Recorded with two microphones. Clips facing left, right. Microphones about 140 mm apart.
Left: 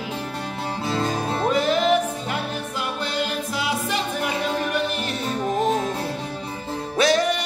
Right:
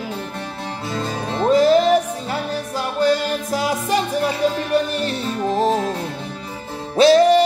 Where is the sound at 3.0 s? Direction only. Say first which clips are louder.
Right 11 dB; 40° right (ahead or behind).